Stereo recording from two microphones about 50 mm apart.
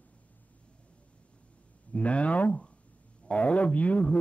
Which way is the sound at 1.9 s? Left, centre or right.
Left.